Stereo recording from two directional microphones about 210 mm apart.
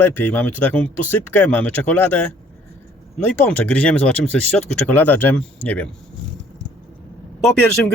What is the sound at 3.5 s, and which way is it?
Speech, 5° left (ahead or behind).